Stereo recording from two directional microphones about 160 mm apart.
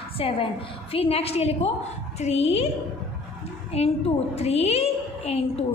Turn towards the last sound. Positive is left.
turn(degrees=40)  # may be behind; listen again after turning